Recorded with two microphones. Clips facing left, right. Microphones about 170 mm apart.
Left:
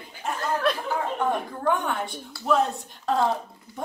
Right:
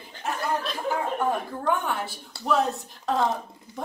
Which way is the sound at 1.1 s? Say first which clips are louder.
Even; 5° right (ahead or behind).